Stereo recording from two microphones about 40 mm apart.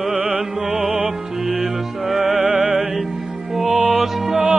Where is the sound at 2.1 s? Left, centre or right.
Right.